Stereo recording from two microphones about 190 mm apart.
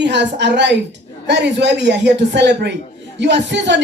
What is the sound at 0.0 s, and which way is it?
A woman's voice, 65° right (ahead or behind).